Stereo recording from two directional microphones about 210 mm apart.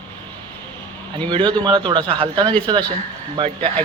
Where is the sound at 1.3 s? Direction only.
20° right (ahead or behind).